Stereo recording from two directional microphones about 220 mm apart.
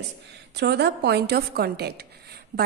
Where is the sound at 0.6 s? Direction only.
50° right (ahead or behind).